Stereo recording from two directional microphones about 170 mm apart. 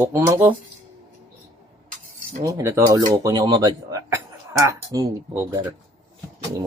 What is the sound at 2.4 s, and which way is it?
Speech, 20° right (ahead or behind).